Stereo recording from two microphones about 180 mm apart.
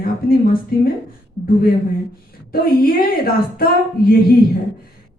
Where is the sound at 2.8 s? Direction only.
55° left (ahead or behind).